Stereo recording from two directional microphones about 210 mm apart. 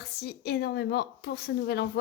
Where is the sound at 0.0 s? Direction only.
50° left (ahead or behind).